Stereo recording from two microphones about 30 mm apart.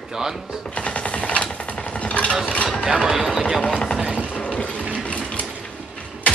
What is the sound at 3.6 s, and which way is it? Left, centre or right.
Speech, left.